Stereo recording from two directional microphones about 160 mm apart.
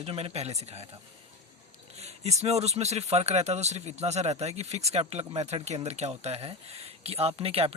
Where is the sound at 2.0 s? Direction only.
40° right (ahead or behind).